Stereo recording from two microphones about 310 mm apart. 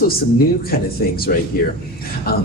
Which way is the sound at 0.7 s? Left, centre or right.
Left.